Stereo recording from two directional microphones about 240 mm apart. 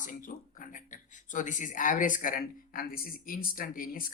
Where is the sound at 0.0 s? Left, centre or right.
Left.